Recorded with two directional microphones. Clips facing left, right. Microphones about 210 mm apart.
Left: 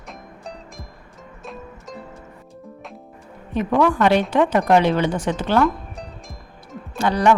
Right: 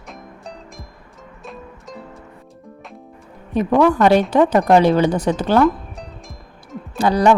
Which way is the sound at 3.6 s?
40° right (ahead or behind).